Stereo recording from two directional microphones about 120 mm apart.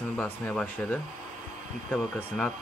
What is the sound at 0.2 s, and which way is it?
Speech, 10° left (ahead or behind).